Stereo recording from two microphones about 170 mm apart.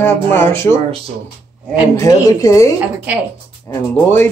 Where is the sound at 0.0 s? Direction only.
15° left (ahead or behind).